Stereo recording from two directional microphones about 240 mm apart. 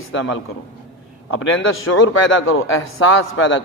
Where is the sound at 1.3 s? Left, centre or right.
Left.